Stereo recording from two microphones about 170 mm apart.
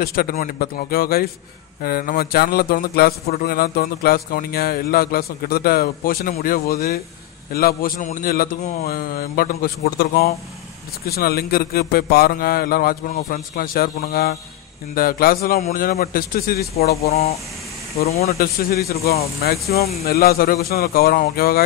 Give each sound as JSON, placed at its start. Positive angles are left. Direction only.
{"t": 0.0, "sound": "speech", "side_deg": 60}
{"t": 17.0, "sound": "speech", "side_deg": 40}
{"t": 18.4, "sound": "speech", "side_deg": 60}